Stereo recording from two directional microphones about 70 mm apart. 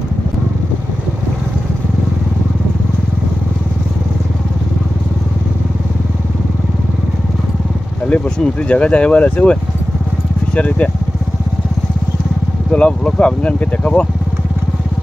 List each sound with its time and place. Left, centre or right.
8.1 s a sound: left
8.6 s speech: centre
12.7 s speech: centre